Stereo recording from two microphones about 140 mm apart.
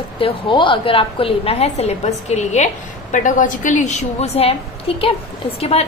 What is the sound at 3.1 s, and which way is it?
A woman's voice, 65° left (ahead or behind).